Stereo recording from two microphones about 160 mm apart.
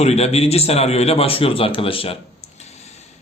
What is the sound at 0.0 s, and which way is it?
A man's voice, 40° left (ahead or behind).